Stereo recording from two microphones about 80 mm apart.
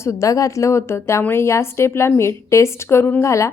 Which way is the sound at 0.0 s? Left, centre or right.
Left.